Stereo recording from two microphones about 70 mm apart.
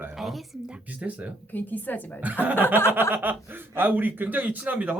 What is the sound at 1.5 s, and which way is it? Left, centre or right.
Speech, left.